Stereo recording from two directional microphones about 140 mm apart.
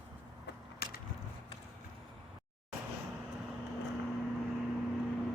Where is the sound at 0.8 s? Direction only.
90° left.